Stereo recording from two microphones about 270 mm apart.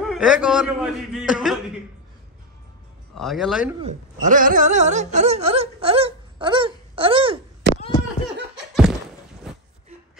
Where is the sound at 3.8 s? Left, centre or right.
Right.